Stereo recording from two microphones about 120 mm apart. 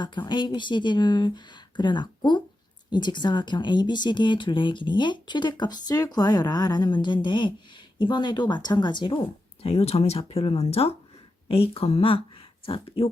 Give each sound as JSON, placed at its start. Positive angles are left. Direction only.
{"t": 0.0, "sound": "speech", "side_deg": 40}
{"t": 9.6, "sound": "speech", "side_deg": 55}